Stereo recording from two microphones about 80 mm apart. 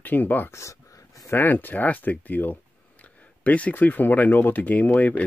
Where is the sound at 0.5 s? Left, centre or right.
Left.